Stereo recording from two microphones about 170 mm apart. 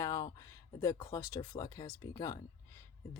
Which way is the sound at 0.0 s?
20° left (ahead or behind).